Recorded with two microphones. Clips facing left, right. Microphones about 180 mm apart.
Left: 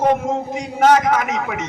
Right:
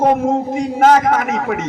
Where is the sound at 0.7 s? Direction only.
45° right (ahead or behind).